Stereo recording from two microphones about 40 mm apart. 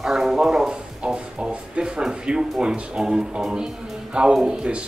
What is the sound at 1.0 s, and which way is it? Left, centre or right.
Speech, right.